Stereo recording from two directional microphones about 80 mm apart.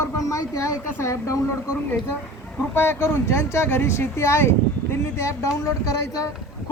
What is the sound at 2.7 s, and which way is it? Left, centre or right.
A woman's voice, left.